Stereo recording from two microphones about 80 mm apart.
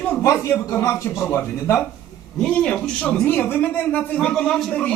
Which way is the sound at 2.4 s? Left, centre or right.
Centre.